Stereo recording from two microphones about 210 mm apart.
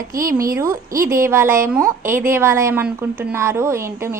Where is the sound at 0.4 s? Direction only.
15° right (ahead or behind).